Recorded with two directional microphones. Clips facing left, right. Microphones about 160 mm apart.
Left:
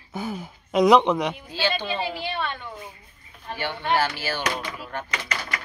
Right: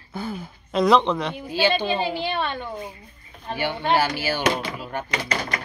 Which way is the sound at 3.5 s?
15° right (ahead or behind).